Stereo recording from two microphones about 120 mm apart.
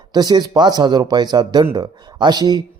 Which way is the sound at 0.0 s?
35° right (ahead or behind).